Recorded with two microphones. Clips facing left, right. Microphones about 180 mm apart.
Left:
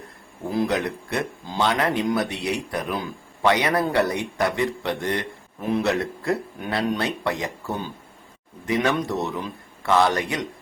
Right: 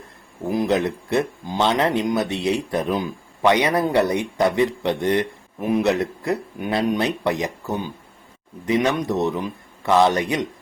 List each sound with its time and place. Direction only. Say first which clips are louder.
0.5 s speech: right 3 dB; 20° right (ahead or behind)